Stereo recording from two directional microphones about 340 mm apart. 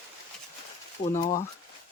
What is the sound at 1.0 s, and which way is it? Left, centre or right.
Speech, left.